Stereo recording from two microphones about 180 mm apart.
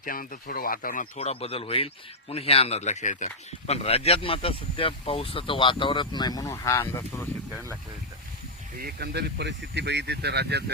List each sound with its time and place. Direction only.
0.0 s speech: 50° left (ahead or behind); by 7.3 s 15° left (ahead or behind)
8.8 s speech: 65° right (ahead or behind)